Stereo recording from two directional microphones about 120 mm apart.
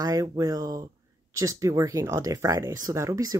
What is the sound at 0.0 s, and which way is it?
Speech, 30° right (ahead or behind).